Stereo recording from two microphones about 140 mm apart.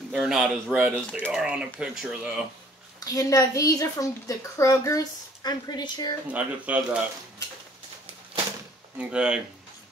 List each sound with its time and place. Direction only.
0.1 s speech: 5° right (ahead or behind)
3.1 s a woman's voice: 25° left (ahead or behind)
6.2 s speech: 10° right (ahead or behind)
8.9 s speech: 5° right (ahead or behind)